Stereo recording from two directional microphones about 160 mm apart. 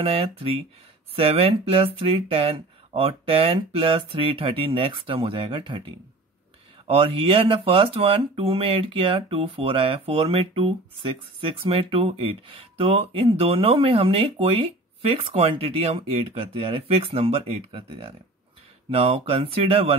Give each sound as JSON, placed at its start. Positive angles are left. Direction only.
{"t": 0.0, "sound": "speech", "side_deg": -35}